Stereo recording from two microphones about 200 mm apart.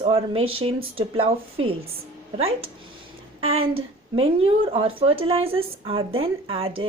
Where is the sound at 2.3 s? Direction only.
30° right (ahead or behind).